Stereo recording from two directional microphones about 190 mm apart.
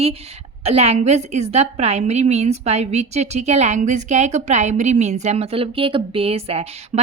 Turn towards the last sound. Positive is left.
turn(degrees=-30)  # may be behind; listen again after turning